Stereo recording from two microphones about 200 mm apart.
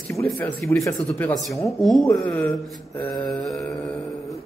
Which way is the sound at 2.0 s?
15° left (ahead or behind).